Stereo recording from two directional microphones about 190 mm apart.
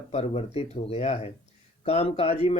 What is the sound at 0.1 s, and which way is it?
A man's voice, 35° left (ahead or behind).